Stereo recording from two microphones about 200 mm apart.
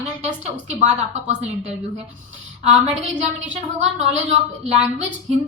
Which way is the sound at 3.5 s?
35° right (ahead or behind).